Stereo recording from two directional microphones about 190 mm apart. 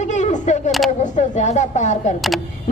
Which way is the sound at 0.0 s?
40° left (ahead or behind).